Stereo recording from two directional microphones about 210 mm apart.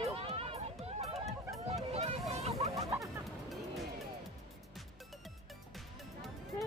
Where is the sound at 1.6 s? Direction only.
30° right (ahead or behind).